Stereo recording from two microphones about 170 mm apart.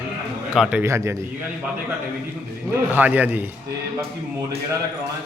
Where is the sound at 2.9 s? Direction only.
10° right (ahead or behind).